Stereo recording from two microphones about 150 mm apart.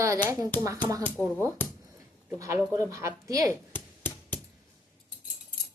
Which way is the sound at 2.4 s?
20° right (ahead or behind).